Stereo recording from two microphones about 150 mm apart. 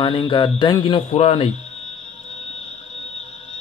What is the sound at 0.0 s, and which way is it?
Speech, 35° left (ahead or behind).